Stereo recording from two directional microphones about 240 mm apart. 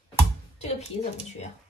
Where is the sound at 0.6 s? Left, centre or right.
Left.